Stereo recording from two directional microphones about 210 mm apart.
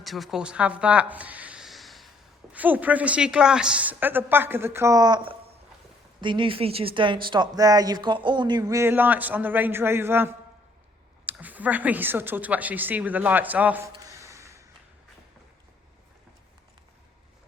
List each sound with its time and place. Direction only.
0.0 s a woman's voice: centre (ahead or behind)